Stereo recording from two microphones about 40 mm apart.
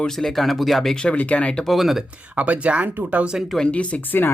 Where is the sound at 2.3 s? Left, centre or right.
Right.